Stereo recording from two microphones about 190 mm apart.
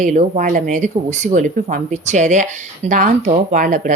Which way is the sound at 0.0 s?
40° right (ahead or behind).